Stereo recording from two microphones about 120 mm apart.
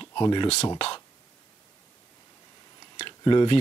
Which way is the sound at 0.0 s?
40° left (ahead or behind).